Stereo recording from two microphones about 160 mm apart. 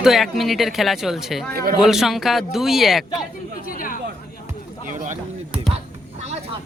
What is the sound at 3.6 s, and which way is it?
Speech, 60° left (ahead or behind).